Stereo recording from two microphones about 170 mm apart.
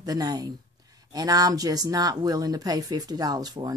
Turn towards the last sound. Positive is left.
turn(degrees=-20)  # may be behind; listen again after turning